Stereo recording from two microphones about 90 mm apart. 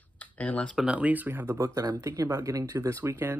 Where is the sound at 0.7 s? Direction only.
10° right (ahead or behind).